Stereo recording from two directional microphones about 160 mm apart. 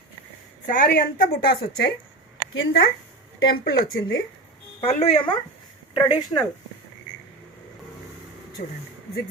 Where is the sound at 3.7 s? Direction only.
70° left (ahead or behind).